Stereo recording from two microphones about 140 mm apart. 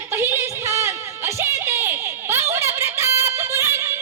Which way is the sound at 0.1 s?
20° right (ahead or behind).